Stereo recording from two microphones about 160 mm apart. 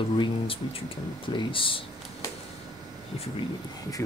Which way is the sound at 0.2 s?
35° left (ahead or behind).